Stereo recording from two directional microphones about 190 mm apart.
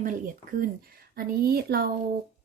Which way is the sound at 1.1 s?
50° right (ahead or behind).